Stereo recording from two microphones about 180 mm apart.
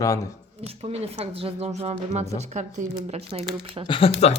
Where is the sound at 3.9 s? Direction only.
30° left (ahead or behind).